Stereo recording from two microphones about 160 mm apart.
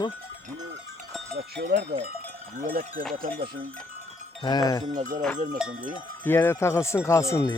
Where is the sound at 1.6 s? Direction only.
90° right.